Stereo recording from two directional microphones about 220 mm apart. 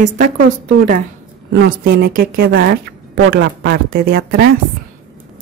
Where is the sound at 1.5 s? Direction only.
45° right (ahead or behind).